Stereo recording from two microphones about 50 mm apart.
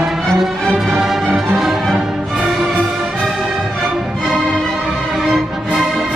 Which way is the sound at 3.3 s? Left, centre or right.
Centre.